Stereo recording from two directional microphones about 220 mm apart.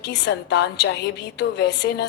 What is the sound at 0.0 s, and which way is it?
A woman's voice, 50° left (ahead or behind).